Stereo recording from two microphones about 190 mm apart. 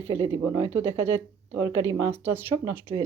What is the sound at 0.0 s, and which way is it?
Speech, 15° right (ahead or behind).